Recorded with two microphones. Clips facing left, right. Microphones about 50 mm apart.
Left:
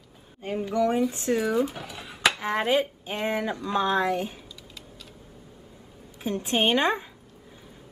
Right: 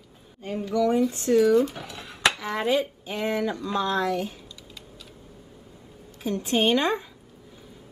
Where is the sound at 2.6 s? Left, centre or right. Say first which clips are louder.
Right 1 dB; centre.